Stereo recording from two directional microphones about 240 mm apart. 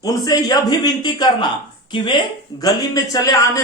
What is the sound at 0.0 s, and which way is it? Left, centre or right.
A man's voice, centre.